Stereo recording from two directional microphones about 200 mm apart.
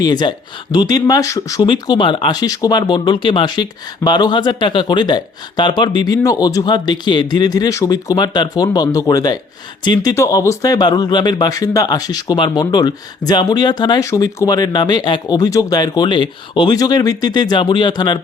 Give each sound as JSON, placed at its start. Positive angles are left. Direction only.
{"t": 0.0, "sound": "speech", "side_deg": 20}